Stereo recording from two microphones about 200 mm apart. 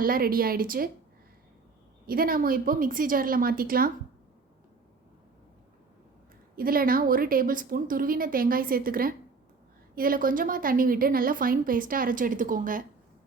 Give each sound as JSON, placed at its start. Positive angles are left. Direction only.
{"t": 0.0, "sound": "a woman's voice", "side_deg": -45}
{"t": 2.0, "sound": "a woman's voice", "side_deg": -45}
{"t": 6.6, "sound": "a woman's voice", "side_deg": -45}